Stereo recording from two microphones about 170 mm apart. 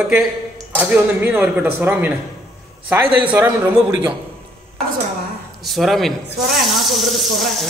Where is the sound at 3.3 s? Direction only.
10° right (ahead or behind).